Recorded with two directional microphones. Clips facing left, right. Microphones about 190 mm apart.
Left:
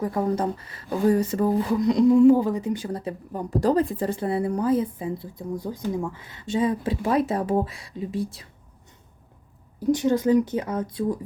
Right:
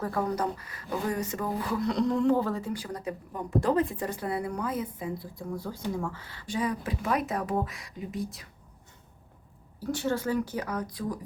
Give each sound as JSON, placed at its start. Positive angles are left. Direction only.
{"t": 0.0, "sound": "a woman's voice", "side_deg": 20}
{"t": 1.7, "sound": "a woman's voice", "side_deg": 15}
{"t": 9.8, "sound": "a woman's voice", "side_deg": 15}